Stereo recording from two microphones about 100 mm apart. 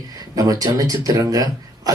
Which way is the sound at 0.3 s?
35° right (ahead or behind).